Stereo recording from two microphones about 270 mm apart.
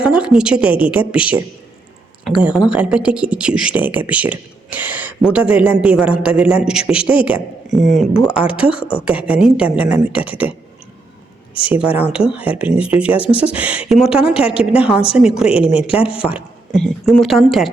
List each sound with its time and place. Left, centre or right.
0.0 s a woman's voice: centre
11.9 s speech: centre
15.7 s speech: left
16.3 s speech: centre